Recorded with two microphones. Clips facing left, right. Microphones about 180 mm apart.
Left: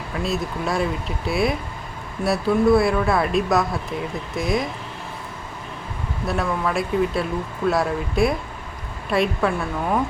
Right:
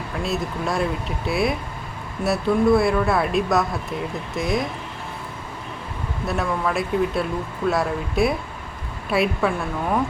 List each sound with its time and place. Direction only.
0.1 s speech: centre (ahead or behind)
6.2 s speech: centre (ahead or behind)